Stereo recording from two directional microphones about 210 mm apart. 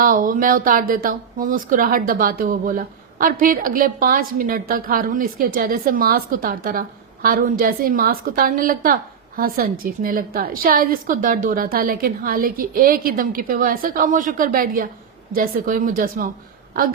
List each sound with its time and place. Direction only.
0.0 s speech: 40° right (ahead or behind)